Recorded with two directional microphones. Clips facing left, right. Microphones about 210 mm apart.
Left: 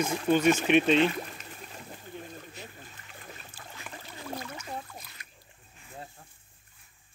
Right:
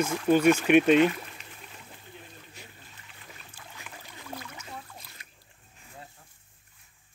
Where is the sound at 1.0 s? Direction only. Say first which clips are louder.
Right 3 dB; 40° left (ahead or behind).